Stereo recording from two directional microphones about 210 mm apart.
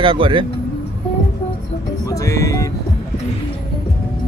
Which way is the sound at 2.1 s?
15° left (ahead or behind).